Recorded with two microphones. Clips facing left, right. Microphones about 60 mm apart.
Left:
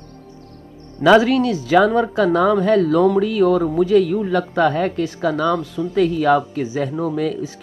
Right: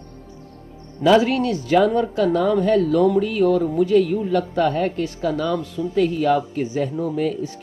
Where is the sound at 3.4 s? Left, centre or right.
Left.